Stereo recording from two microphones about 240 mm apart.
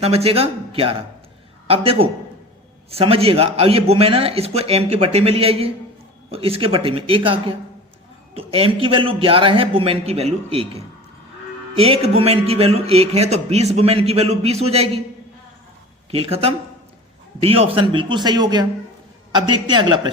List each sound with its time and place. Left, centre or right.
0.0 s speech: right
16.1 s speech: right